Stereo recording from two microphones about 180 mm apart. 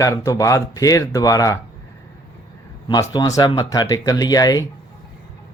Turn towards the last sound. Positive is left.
turn(degrees=20)  # may be behind; listen again after turning